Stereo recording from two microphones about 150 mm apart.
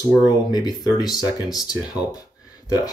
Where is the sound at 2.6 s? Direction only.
25° left (ahead or behind).